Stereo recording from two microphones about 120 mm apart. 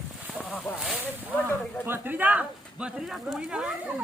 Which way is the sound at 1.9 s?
15° right (ahead or behind).